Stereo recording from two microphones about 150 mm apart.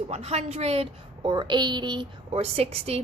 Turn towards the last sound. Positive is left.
turn(degrees=-40)  # may be behind; listen again after turning